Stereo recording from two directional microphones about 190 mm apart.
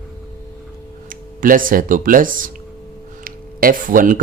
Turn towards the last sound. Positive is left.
turn(degrees=-45)  # may be behind; listen again after turning